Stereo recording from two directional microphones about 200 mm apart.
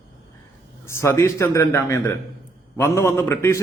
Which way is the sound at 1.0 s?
15° left (ahead or behind).